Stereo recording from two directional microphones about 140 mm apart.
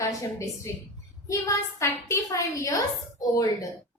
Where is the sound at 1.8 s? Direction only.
20° left (ahead or behind).